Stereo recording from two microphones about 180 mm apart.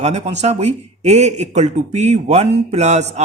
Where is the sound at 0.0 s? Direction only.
40° right (ahead or behind).